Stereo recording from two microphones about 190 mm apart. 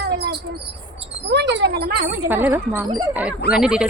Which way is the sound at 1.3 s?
65° right (ahead or behind).